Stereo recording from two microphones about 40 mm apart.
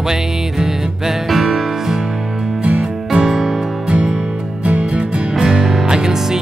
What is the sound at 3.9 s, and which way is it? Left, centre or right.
Music, right.